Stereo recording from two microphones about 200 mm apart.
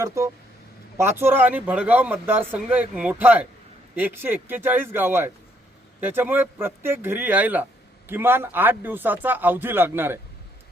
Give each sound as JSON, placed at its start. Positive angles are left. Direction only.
{"t": 0.0, "sound": "speech", "side_deg": -15}